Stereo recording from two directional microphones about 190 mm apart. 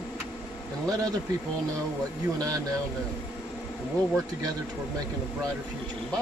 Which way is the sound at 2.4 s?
20° right (ahead or behind).